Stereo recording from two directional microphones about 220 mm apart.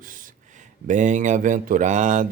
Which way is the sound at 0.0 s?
40° right (ahead or behind).